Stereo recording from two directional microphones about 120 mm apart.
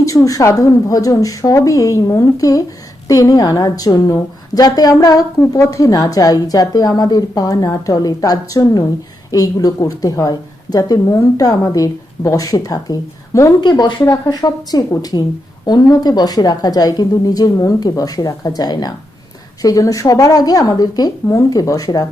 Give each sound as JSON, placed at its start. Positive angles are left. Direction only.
{"t": 0.0, "sound": "a woman's voice", "side_deg": 25}
{"t": 13.6, "sound": "a woman's voice", "side_deg": 40}